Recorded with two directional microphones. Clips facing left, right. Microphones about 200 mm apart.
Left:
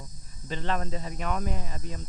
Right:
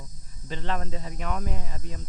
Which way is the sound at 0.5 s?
45° left (ahead or behind).